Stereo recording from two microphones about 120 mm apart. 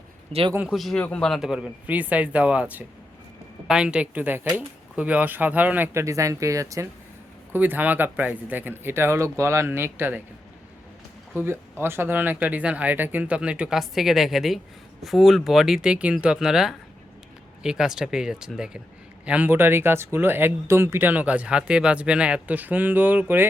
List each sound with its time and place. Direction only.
0.7 s speech: centre (ahead or behind); by 6.8 s 25° right (ahead or behind)
7.5 s speech: 15° right (ahead or behind)
11.4 s speech: 20° right (ahead or behind)